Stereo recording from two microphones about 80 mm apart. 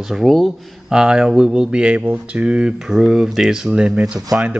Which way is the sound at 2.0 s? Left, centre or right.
Right.